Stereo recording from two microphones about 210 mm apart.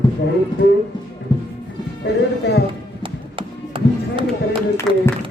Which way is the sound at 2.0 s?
50° left (ahead or behind).